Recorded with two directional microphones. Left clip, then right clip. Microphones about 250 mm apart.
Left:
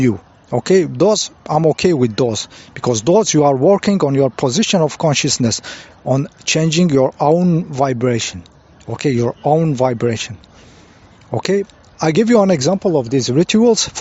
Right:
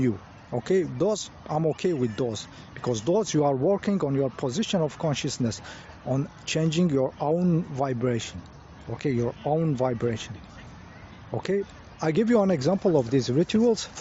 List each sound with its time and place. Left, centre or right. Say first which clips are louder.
0.5 s speech: left 11 dB; left